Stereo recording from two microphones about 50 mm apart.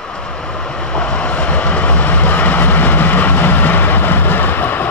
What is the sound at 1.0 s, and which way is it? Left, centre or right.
Vehicle, left.